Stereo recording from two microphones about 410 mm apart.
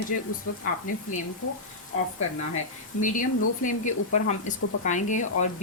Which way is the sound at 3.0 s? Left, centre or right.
Centre.